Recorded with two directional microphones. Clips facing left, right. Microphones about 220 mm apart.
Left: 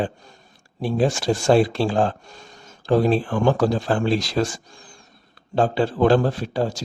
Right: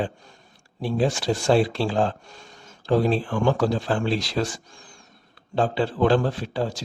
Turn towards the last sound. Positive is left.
turn(degrees=45)  # may be behind; listen again after turning